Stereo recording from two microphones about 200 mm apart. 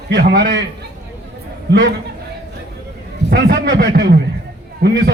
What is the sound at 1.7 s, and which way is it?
Speech, 55° right (ahead or behind).